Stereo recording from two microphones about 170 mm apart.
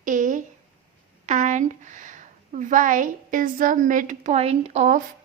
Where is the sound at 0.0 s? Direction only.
50° right (ahead or behind).